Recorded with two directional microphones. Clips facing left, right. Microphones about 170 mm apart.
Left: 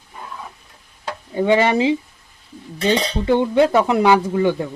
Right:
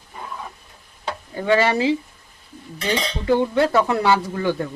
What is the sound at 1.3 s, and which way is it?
Speech, 20° left (ahead or behind).